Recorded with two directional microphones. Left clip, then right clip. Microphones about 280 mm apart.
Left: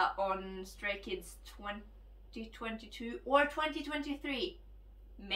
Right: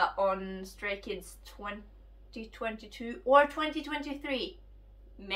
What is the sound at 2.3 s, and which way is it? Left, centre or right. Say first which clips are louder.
Speech: right 5 dB; centre.